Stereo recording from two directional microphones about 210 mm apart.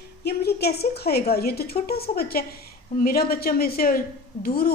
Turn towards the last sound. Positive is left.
turn(degrees=45)  # may be behind; listen again after turning